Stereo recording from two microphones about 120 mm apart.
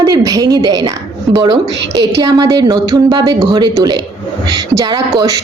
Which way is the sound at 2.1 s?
30° right (ahead or behind).